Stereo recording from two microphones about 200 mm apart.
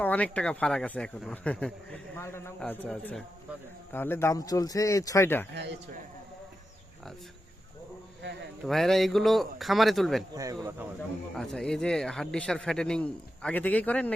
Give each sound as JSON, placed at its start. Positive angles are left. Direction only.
{"t": 0.0, "sound": "speech", "side_deg": 5}
{"t": 8.6, "sound": "speech", "side_deg": 0}
{"t": 10.3, "sound": "speech", "side_deg": -15}
{"t": 11.3, "sound": "speech", "side_deg": 5}